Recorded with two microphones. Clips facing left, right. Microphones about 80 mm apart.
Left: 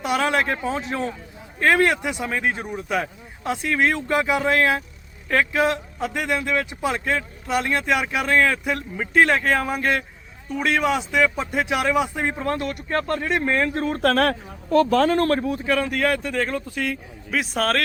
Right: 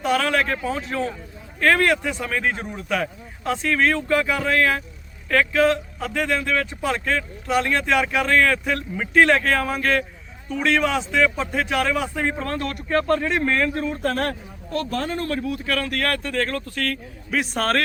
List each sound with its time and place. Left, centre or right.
0.2 s speech: left
7.4 s speech: centre
14.0 s speech: left
15.3 s speech: left
15.6 s speech: centre
17.3 s a man's voice: centre